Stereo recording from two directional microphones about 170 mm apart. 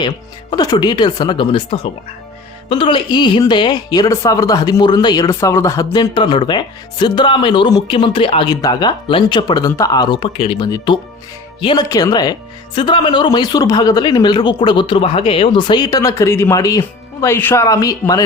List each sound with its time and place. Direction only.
0.5 s speech: 25° left (ahead or behind)